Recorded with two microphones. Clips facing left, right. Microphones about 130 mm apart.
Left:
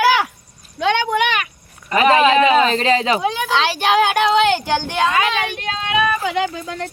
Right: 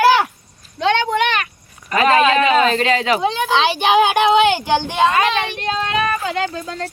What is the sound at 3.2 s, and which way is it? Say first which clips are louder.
Speech: right 2 dB; 5° left (ahead or behind).